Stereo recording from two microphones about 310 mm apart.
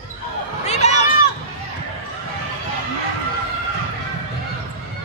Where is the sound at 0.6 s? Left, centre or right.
Left.